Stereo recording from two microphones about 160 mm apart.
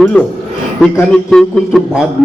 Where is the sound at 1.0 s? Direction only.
Centre (ahead or behind).